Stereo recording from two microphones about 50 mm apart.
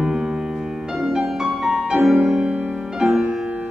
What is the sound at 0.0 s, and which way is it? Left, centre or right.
Music, centre.